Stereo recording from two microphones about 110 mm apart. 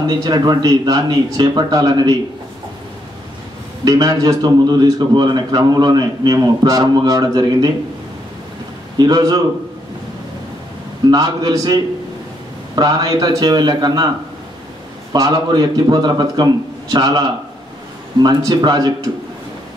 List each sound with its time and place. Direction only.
0.0 s a man's voice: 40° right (ahead or behind)
3.8 s a man's voice: 35° right (ahead or behind)
8.9 s a man's voice: 40° right (ahead or behind)
11.1 s a man's voice: 40° right (ahead or behind)
15.1 s a man's voice: 40° right (ahead or behind)
18.2 s a man's voice: 40° right (ahead or behind)